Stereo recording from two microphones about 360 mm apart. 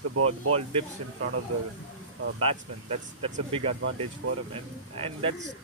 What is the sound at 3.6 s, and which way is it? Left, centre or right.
Speech, right.